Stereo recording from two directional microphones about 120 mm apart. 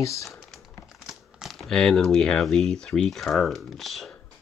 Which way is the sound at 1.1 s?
Centre (ahead or behind).